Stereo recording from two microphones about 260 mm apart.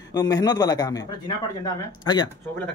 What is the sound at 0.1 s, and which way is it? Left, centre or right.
Speech, centre.